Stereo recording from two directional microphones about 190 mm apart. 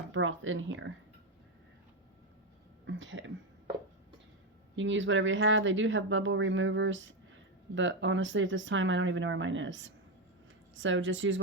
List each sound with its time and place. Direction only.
0.1 s speech: 90° right
2.8 s speech: 75° right (ahead or behind)
4.7 s speech: 80° right